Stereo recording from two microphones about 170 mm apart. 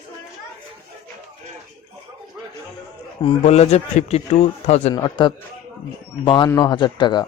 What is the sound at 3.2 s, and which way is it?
Speech, 40° left (ahead or behind).